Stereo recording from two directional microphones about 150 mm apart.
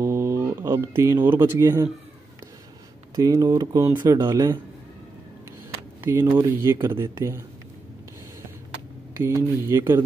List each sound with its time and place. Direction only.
0.0 s speech: 20° right (ahead or behind)
3.2 s speech: 25° right (ahead or behind)
3.8 s speech: 15° right (ahead or behind)
5.9 s speech: 20° right (ahead or behind)
9.2 s speech: 15° right (ahead or behind)